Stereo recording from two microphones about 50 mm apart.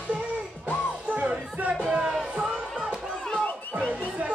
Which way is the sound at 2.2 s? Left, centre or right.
Right.